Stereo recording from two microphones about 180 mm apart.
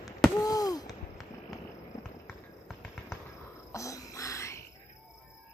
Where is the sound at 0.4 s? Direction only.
20° left (ahead or behind).